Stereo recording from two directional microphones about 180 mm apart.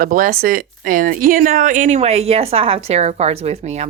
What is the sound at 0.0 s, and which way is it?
Speech, 50° right (ahead or behind).